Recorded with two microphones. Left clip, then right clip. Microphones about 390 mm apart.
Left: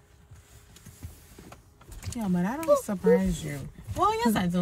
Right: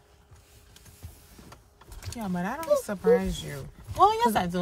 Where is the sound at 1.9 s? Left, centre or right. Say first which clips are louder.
Left 2 dB; centre.